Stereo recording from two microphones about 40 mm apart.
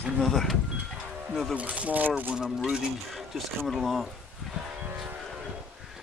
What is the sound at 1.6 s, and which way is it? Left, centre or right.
Speech, right.